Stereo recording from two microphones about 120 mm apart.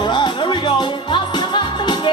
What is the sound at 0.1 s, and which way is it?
Music, 40° left (ahead or behind).